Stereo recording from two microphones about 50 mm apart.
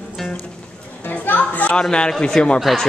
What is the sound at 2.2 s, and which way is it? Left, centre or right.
Speech, centre.